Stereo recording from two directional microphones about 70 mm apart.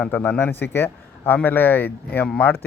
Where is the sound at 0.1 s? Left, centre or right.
Left.